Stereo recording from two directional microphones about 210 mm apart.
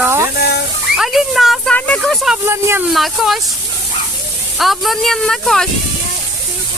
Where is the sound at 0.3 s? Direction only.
50° left (ahead or behind).